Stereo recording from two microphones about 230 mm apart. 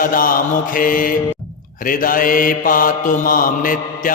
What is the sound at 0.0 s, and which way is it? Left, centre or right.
Mantra, left.